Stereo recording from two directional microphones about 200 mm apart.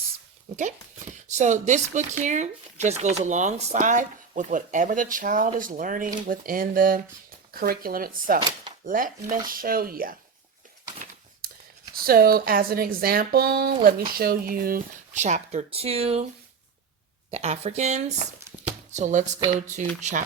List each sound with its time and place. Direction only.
0.5 s speech: 35° right (ahead or behind)
11.9 s speech: 50° right (ahead or behind); by 16.2 s 30° right (ahead or behind)
17.3 s speech: 35° right (ahead or behind)
18.6 s a sound: 35° right (ahead or behind)
20.0 s speech: 35° right (ahead or behind)